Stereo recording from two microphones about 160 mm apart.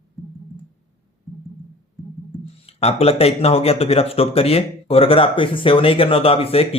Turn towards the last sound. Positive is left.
turn(degrees=35)  # may be behind; listen again after turning